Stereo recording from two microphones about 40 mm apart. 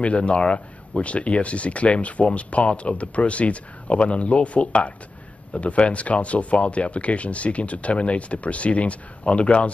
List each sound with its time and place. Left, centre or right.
0.0 s speech: left